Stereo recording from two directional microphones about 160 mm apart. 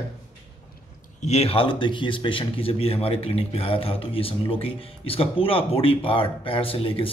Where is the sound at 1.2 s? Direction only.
40° left (ahead or behind).